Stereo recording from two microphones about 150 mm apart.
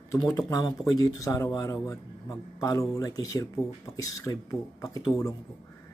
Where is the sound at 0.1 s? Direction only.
20° left (ahead or behind).